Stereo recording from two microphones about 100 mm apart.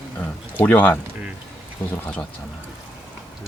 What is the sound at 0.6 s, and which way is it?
Speech, 20° left (ahead or behind).